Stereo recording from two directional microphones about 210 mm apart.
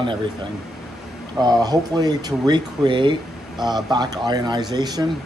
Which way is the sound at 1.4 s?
20° right (ahead or behind).